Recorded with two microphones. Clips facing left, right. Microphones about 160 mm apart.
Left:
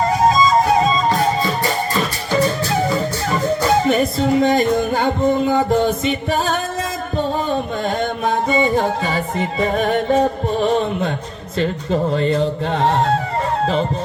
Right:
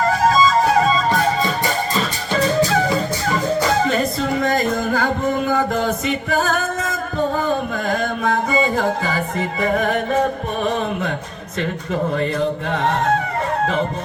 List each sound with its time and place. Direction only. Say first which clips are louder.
0.3 s music: left 1 dB; 20° left (ahead or behind)
3.7 s music: left 3 dB; 20° left (ahead or behind)